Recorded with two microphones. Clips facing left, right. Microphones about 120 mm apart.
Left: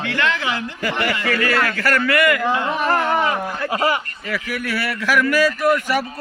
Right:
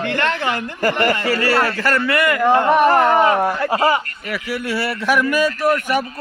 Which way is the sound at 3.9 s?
25° right (ahead or behind).